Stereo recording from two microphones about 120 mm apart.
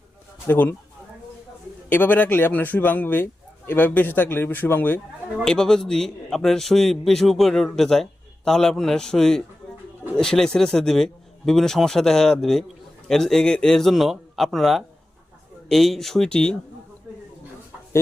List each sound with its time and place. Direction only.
0.4 s speech: 15° left (ahead or behind)
1.9 s speech: 15° left (ahead or behind)
5.5 s a man's voice: 5° left (ahead or behind)